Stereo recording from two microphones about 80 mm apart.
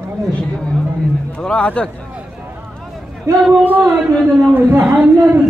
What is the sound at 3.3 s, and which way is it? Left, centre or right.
Speech, right.